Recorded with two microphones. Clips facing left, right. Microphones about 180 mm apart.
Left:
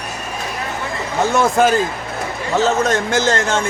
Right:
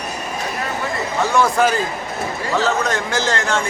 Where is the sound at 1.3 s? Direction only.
25° left (ahead or behind).